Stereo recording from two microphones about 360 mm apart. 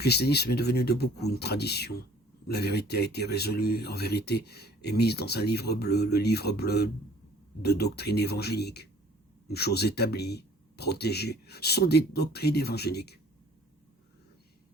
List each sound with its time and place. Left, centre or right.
0.0 s speech: left